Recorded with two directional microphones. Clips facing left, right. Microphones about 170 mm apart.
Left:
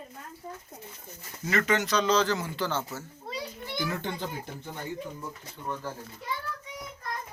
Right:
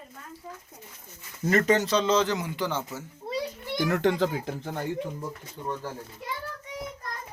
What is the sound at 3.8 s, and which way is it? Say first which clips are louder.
A child's voice: right 11 dB; 80° right.